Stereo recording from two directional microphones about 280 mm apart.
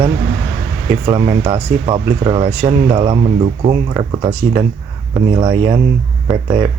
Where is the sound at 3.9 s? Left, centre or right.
Centre.